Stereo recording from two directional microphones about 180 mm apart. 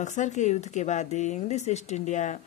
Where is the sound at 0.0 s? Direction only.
40° left (ahead or behind).